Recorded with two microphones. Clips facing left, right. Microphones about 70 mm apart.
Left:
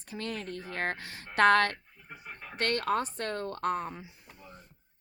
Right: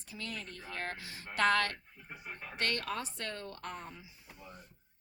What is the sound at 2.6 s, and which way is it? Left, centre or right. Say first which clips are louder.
Speech: left 7 dB; left.